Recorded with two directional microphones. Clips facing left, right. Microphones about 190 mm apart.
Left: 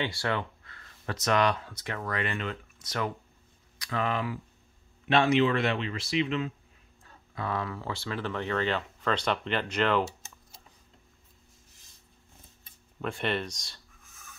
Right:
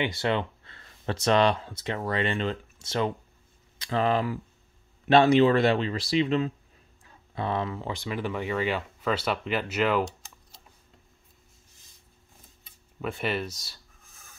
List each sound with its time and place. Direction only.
0.0 s speech: 20° right (ahead or behind); by 6.5 s 35° right (ahead or behind)
7.3 s speech: 25° right (ahead or behind); by 10.0 s 5° right (ahead or behind)
13.0 s speech: 5° right (ahead or behind)